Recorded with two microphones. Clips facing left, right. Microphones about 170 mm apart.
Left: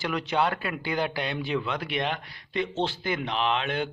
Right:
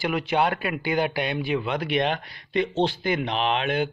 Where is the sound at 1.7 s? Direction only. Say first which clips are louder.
Right 5 dB; 65° right (ahead or behind).